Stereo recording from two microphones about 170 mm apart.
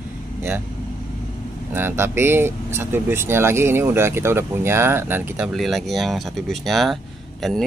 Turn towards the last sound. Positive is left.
turn(degrees=0)  # may be behind; listen again after turning